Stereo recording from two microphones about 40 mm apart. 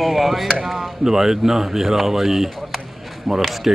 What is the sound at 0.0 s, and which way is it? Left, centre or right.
Chop, centre.